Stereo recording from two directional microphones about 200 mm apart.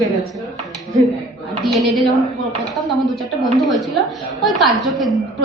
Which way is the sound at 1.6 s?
Centre (ahead or behind).